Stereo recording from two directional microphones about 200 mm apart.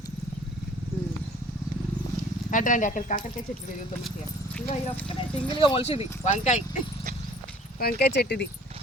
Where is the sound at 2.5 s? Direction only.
40° left (ahead or behind).